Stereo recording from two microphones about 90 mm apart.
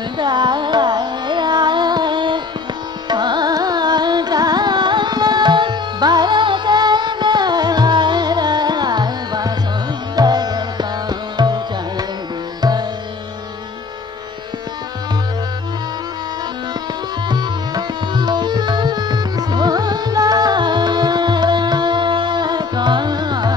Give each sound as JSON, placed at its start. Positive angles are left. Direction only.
{"t": 0.2, "sound": "carnatic music", "side_deg": -55}
{"t": 10.1, "sound": "music", "side_deg": -50}
{"t": 17.3, "sound": "music", "side_deg": -55}